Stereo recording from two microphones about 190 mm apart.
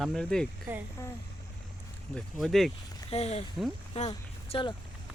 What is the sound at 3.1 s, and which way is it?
Speech, 35° left (ahead or behind).